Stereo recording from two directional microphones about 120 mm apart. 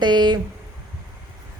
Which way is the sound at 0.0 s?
40° right (ahead or behind).